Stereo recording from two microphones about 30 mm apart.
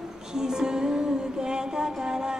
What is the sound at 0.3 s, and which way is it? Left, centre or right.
Music, right.